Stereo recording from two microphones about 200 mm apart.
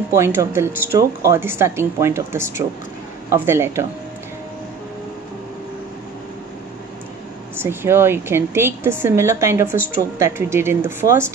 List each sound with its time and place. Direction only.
0.1 s speech: 15° right (ahead or behind)
7.5 s speech: 10° right (ahead or behind)